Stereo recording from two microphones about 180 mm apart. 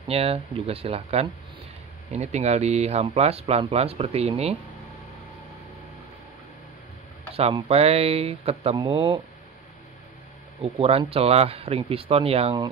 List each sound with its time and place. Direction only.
0.1 s speech: 35° right (ahead or behind)
7.3 s speech: 35° right (ahead or behind)
10.6 s speech: 35° right (ahead or behind)